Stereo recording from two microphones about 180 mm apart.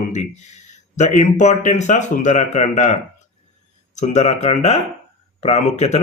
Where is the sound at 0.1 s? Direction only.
40° left (ahead or behind).